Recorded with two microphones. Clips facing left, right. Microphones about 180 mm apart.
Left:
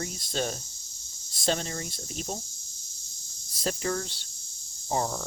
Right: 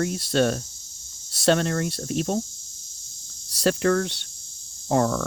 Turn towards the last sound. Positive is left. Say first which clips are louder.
# right 8 dB
turn(degrees=-70)  # may be behind; listen again after turning